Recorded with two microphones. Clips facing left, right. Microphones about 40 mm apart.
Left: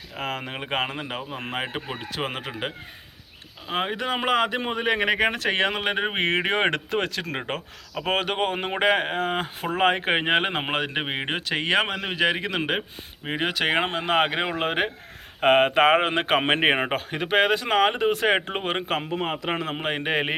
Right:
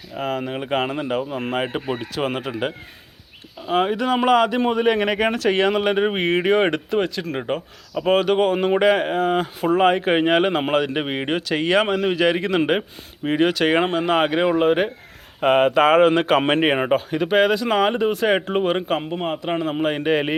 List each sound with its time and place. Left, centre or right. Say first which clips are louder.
0.2 s speech: right 6 dB; left
0.9 s speech: right 8 dB; centre
6.1 s speech: right 5 dB; left; by 12.5 s centre
12.5 s speech: right 7 dB; centre
13.2 s speech: right 6 dB; centre
14.6 s speech: right 7 dB; left
15.9 s speech: right 5 dB; centre
16.9 s speech: right 5 dB; left